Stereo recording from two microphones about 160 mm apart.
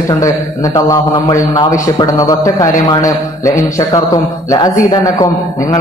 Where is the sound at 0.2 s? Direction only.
20° left (ahead or behind).